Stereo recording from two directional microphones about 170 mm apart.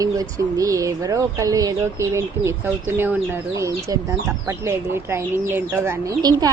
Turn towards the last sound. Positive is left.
turn(degrees=-20)  # may be behind; listen again after turning